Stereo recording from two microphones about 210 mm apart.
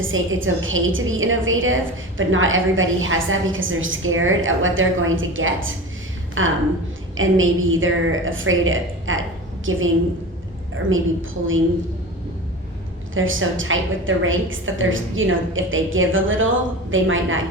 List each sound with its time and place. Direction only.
0.0 s a woman's voice: 70° right (ahead or behind)
10.8 s a woman's voice: 70° right (ahead or behind)
13.1 s a woman's voice: 70° right (ahead or behind)